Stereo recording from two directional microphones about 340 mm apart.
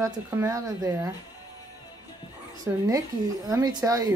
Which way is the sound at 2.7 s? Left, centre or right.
Centre.